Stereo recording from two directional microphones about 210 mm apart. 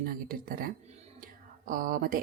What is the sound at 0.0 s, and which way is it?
Speech, 45° right (ahead or behind).